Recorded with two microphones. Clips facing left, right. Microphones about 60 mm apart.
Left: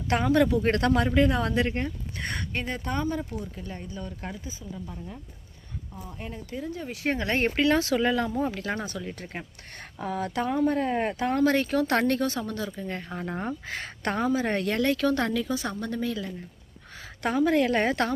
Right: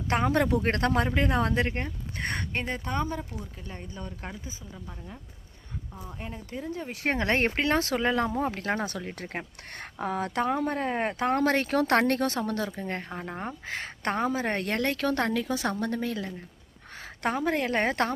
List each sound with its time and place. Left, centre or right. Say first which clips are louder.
0.1 s speech: left 2 dB; right
3.8 s speech: left 2 dB; right
4.7 s speech: left 5 dB; centre
6.1 s speech: left 1 dB; centre
6.5 s speech: left 1 dB; right
7.0 s speech: even; right
7.5 s speech: left 3 dB; right
9.1 s speech: right 2 dB; right
9.7 s speech: right 1 dB; right
11.2 s speech: left 1 dB; right
13.1 s speech: left 3 dB; centre; by 16.3 s right
17.2 s speech: left 4 dB; right